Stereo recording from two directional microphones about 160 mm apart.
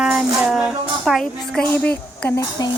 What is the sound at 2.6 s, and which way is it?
Speech, 25° left (ahead or behind).